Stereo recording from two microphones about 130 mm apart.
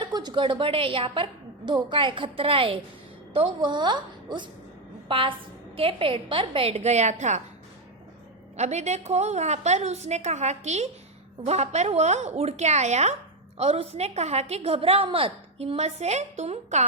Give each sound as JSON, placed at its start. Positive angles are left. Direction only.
{"t": 0.0, "sound": "a woman's voice", "side_deg": -35}
{"t": 8.5, "sound": "a woman's voice", "side_deg": -60}